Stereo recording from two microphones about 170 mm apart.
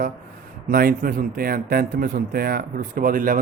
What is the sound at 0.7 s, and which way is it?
Speech, 60° right (ahead or behind).